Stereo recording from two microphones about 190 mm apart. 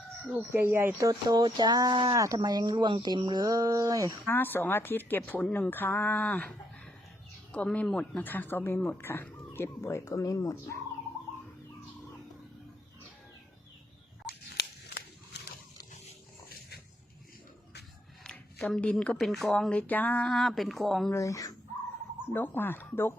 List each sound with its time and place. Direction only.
0.3 s speech: 10° right (ahead or behind)
4.3 s speech: 10° left (ahead or behind)
7.5 s speech: 5° left (ahead or behind)
14.5 s a sound: 55° left (ahead or behind)
16.5 s dog: 55° left (ahead or behind)
18.2 s a sound: 5° left (ahead or behind)
19.2 s speech: centre (ahead or behind)
21.1 s speech: 15° left (ahead or behind)